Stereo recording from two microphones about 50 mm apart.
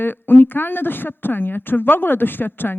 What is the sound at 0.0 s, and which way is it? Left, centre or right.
Speech, left.